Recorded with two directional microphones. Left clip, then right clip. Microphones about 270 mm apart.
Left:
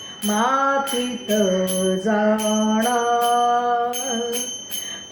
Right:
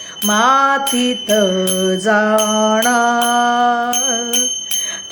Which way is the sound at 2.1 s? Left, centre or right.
Right.